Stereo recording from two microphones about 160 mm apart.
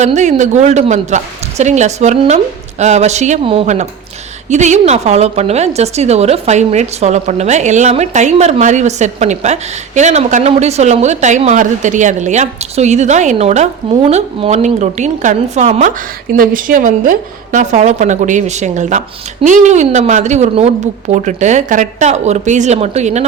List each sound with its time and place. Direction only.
0.0 s a woman's voice: 45° right (ahead or behind)
3.4 s a woman's voice: 35° right (ahead or behind)
16.3 s a woman's voice: 60° right (ahead or behind); by 23.2 s 45° right (ahead or behind)